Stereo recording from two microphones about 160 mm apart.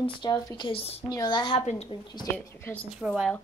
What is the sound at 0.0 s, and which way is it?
A woman's voice, 30° left (ahead or behind).